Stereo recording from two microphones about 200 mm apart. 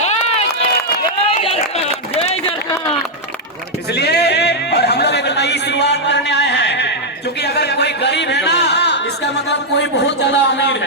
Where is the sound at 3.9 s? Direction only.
55° left (ahead or behind).